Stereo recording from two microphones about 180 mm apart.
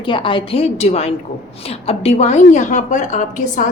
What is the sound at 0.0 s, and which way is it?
A woman's voice, 25° left (ahead or behind).